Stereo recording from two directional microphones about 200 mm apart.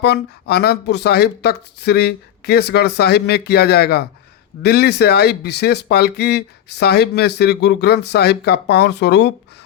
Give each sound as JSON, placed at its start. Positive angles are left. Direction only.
{"t": 0.0, "sound": "speech", "side_deg": 55}